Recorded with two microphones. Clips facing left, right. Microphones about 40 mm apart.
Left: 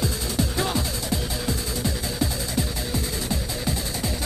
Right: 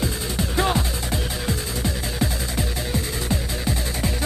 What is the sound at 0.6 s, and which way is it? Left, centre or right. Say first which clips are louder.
Music: right 4 dB; right.